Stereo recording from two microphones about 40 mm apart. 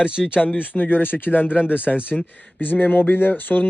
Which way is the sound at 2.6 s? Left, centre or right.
Left.